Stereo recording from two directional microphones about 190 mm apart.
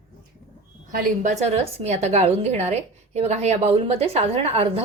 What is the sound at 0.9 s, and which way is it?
Speech, 45° right (ahead or behind).